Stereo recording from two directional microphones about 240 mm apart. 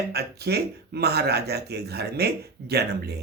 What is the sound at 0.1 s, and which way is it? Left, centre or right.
Speech, right.